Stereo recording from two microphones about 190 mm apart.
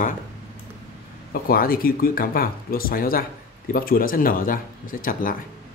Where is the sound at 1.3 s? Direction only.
50° left (ahead or behind).